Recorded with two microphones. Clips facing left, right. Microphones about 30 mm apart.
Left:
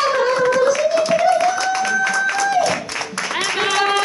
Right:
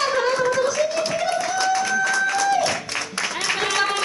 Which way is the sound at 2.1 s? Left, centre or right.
Left.